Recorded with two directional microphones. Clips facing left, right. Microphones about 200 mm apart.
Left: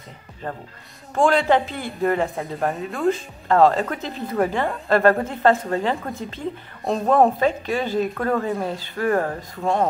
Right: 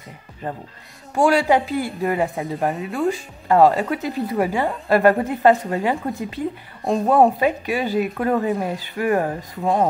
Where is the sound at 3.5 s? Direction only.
15° right (ahead or behind).